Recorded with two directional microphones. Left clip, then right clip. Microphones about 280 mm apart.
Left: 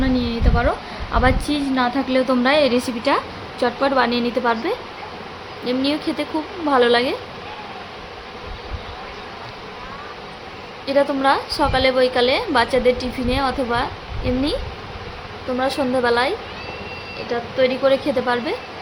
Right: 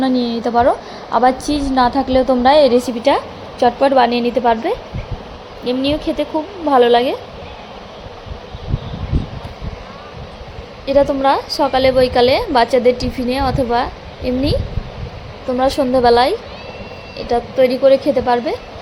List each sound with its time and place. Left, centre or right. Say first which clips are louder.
0.0 s a woman's voice: right 5 dB; centre
10.8 s a woman's voice: right 4 dB; centre
15.5 s a woman's voice: right 6 dB; centre